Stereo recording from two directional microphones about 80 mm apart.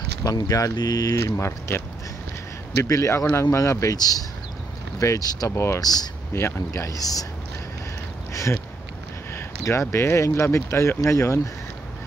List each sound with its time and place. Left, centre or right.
0.2 s speech: left
2.8 s speech: left
4.9 s speech: left
5.8 s speech: left
6.3 s speech: left
8.3 s a sound: left
9.3 s speech: left